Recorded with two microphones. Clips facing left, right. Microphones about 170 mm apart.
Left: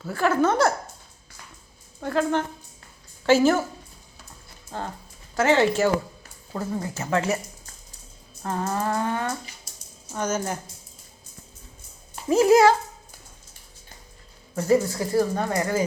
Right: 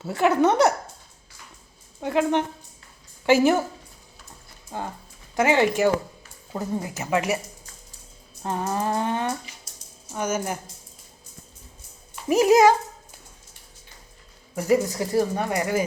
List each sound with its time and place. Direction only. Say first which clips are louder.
0.0 s speech: right 2 dB; 20° right (ahead or behind)
2.0 s speech: right 2 dB; 15° right (ahead or behind)
4.7 s dog: right 1 dB; 10° right (ahead or behind)
5.4 s speech: even; 15° right (ahead or behind)
8.4 s speech: even; 15° right (ahead or behind)
12.3 s speech: even; 15° right (ahead or behind)
14.5 s speech: even; 15° right (ahead or behind)